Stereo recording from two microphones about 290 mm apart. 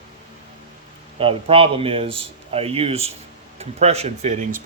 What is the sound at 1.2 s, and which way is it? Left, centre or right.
Speech, centre.